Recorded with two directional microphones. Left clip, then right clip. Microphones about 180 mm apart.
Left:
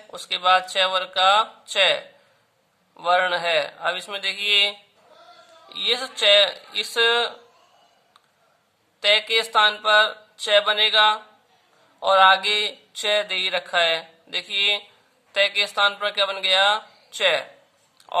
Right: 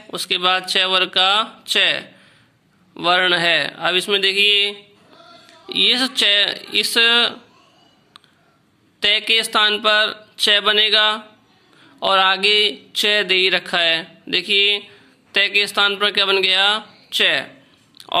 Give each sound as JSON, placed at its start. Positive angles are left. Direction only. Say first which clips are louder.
{"t": 0.1, "sound": "a man's voice", "louder": "right 1 dB", "side_deg": -15}
{"t": 9.0, "sound": "speech", "louder": "right 3 dB", "side_deg": -20}